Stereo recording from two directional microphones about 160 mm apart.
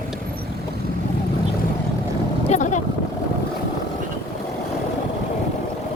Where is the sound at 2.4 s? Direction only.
45° left (ahead or behind).